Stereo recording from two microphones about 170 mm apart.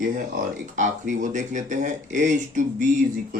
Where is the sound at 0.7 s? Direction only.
45° right (ahead or behind).